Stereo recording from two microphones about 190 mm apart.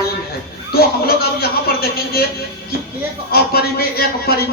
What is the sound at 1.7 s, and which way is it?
Speech, 50° left (ahead or behind).